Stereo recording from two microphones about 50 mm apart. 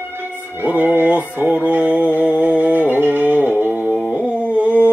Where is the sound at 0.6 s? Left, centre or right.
Right.